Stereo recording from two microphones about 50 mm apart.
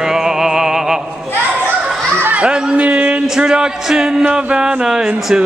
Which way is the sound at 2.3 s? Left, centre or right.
Right.